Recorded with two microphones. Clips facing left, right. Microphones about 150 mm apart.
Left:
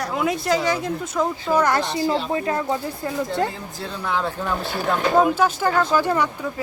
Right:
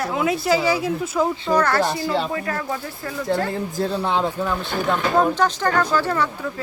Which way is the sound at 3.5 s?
40° right (ahead or behind).